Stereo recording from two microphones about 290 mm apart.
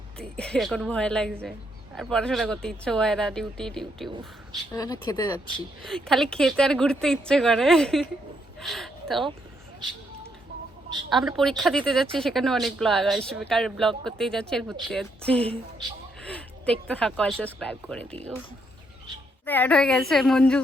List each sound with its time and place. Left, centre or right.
0.2 s a woman's voice: centre
4.7 s speech: centre
5.8 s a woman's voice: centre
11.1 s a woman's voice: centre
16.2 s a sound: centre
16.9 s a woman's voice: centre
19.5 s a woman's voice: centre